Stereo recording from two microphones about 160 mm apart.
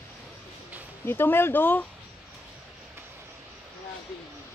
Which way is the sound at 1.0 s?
15° left (ahead or behind).